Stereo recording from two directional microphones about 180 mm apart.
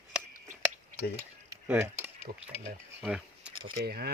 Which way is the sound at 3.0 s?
5° right (ahead or behind).